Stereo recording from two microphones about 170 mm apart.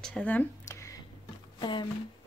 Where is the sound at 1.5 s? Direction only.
25° left (ahead or behind).